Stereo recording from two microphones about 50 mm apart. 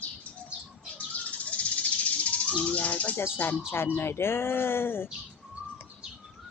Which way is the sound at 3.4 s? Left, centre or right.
Left.